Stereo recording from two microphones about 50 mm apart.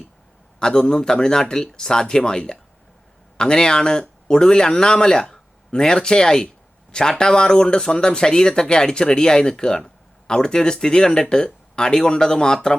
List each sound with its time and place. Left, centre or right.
0.6 s a man's voice: centre